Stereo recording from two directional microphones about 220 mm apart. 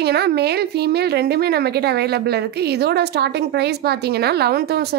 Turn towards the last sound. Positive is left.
turn(degrees=-45)  # may be behind; listen again after turning